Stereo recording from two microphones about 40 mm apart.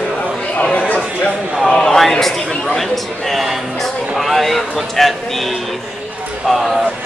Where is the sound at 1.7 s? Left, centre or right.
Centre.